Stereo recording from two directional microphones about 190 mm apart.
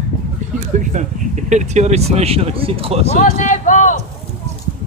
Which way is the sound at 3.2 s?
40° left (ahead or behind).